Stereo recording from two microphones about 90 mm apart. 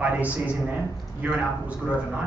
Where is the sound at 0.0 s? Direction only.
15° right (ahead or behind).